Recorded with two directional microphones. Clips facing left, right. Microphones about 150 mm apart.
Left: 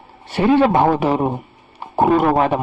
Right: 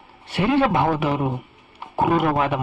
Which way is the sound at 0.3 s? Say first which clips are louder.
Left 5 dB; 35° left (ahead or behind).